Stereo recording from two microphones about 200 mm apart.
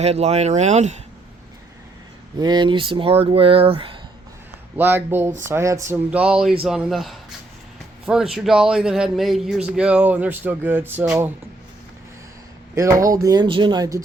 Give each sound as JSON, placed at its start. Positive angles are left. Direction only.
{"t": 0.0, "sound": "speech", "side_deg": -30}
{"t": 2.4, "sound": "speech", "side_deg": -20}
{"t": 4.8, "sound": "speech", "side_deg": -10}
{"t": 13.1, "sound": "speech", "side_deg": -20}